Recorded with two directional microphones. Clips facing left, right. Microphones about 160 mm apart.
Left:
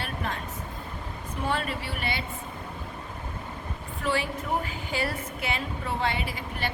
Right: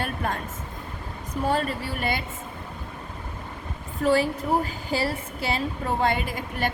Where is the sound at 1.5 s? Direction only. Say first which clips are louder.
Right 4 dB; 40° right (ahead or behind).